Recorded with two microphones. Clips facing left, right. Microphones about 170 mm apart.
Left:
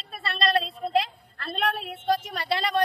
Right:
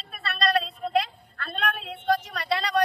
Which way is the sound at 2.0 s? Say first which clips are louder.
Right 1 dB; 25° left (ahead or behind).